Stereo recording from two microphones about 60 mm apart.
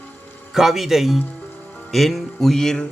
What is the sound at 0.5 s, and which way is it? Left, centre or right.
Speech, centre.